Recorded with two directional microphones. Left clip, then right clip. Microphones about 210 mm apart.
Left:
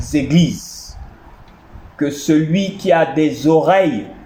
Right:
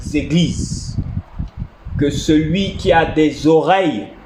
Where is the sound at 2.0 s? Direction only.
20° right (ahead or behind).